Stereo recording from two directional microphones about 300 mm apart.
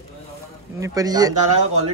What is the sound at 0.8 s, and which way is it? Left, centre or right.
A man's voice, centre.